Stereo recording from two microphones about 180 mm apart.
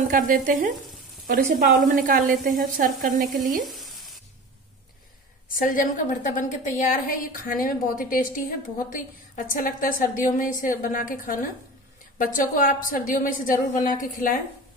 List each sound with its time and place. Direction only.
0.1 s speech: 45° right (ahead or behind)
3.7 s sizzle: centre (ahead or behind)
5.7 s a woman's voice: 50° left (ahead or behind)